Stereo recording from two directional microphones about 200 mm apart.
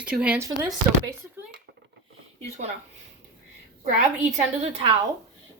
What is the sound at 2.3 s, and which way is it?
Speech, 35° right (ahead or behind).